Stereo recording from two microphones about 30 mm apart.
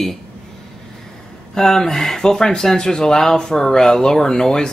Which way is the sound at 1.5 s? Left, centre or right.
Centre.